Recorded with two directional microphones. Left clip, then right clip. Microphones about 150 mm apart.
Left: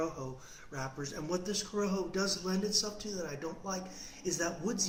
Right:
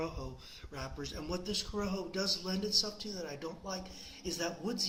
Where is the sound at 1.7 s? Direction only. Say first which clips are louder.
Left 3 dB; 30° right (ahead or behind).